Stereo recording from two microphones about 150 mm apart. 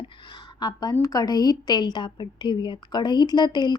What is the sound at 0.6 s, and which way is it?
A woman's voice, 30° left (ahead or behind).